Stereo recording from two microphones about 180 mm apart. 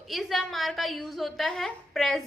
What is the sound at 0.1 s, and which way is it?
A woman's voice, centre (ahead or behind).